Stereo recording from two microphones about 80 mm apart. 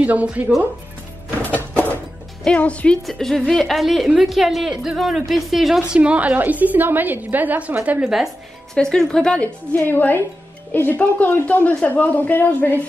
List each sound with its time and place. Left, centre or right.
0.0 s a woman's voice: centre
1.4 s a sound: centre
2.4 s a woman's voice: centre
3.1 s a woman's voice: centre
5.9 s a woman's voice: centre
8.0 s a woman's voice: centre
8.7 s a woman's voice: centre
9.8 s speech: left